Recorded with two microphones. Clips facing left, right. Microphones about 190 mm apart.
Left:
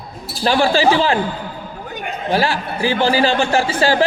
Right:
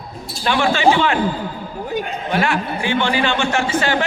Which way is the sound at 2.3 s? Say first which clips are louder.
Left 3 dB; 35° left (ahead or behind).